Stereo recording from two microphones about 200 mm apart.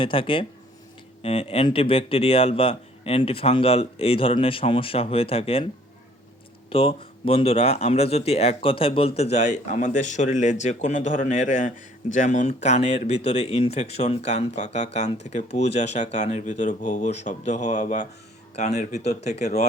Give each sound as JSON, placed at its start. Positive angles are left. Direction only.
{"t": 0.0, "sound": "speech", "side_deg": 25}
{"t": 6.7, "sound": "speech", "side_deg": 25}